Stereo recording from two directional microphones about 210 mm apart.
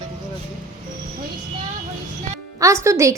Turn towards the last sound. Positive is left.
turn(degrees=-15)  # may be behind; listen again after turning